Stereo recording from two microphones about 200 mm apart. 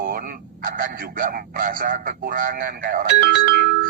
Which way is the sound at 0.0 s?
45° right (ahead or behind).